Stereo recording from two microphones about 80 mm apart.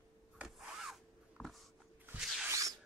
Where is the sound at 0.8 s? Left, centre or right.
Centre.